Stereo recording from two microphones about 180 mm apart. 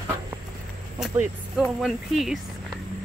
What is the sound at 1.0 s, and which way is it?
Speech, 5° right (ahead or behind).